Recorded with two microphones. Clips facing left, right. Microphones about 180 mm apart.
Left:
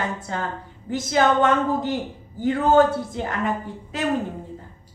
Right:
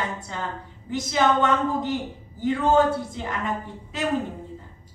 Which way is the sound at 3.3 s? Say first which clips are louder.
Left 2 dB; centre (ahead or behind).